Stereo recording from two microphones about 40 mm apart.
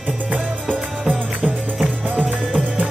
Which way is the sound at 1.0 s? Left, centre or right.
Right.